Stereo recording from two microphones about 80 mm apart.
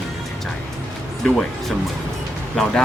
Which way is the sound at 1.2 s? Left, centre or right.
Centre.